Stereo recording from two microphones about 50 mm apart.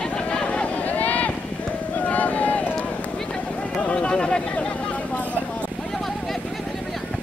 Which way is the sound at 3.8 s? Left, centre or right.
Left.